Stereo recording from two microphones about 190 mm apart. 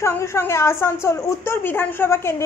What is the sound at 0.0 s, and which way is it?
A woman's voice, 15° left (ahead or behind).